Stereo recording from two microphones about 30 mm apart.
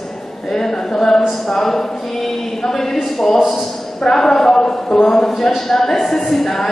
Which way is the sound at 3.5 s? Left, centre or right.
Centre.